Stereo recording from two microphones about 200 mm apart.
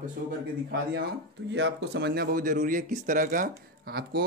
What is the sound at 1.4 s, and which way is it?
A man's voice, 60° right (ahead or behind).